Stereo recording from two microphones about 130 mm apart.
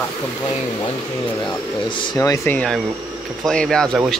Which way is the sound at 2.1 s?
25° left (ahead or behind).